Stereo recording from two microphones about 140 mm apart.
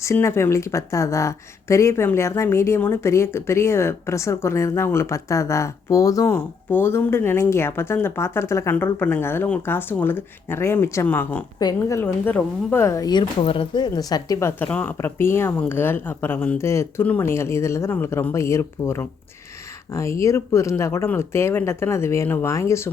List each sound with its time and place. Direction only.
0.0 s speech: 20° left (ahead or behind)